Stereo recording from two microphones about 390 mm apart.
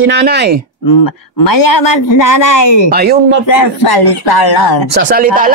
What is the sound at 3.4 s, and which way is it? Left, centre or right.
Speech, left.